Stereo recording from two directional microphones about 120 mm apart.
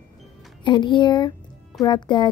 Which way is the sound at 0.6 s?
40° left (ahead or behind).